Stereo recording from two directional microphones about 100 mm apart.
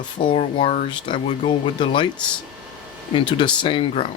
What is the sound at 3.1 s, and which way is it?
Speech, 55° left (ahead or behind).